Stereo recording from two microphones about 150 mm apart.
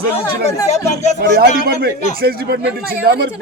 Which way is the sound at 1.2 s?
90° right.